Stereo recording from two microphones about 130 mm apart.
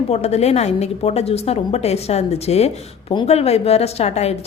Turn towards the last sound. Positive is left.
turn(degrees=55)  # may be behind; listen again after turning